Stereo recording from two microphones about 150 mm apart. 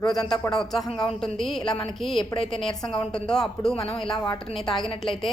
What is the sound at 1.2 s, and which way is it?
Speech, 5° left (ahead or behind).